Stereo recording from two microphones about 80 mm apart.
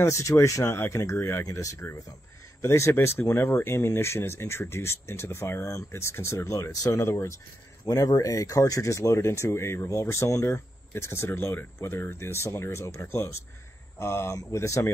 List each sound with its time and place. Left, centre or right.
0.0 s speech: left